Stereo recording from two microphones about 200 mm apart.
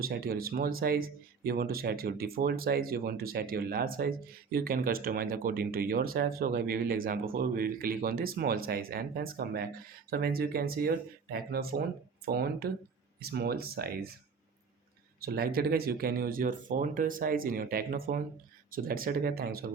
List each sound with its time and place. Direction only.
0.0 s speech: 50° right (ahead or behind)
15.2 s speech: 50° right (ahead or behind)